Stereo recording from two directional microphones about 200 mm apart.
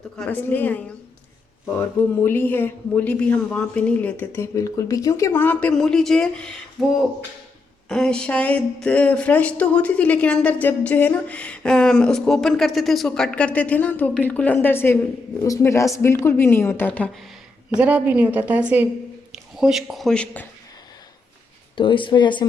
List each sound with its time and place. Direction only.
0.2 s a woman's voice: 10° left (ahead or behind)
17.7 s a woman's voice: 5° right (ahead or behind)
21.8 s speech: 25° left (ahead or behind)